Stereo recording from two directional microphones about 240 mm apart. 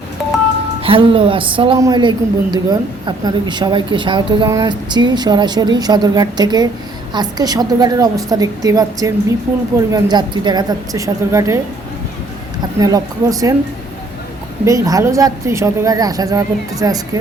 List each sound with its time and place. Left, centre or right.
0.8 s speech: right
12.8 s speech: centre
14.6 s speech: centre